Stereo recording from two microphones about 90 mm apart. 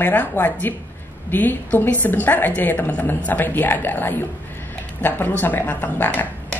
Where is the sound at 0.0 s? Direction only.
20° left (ahead or behind).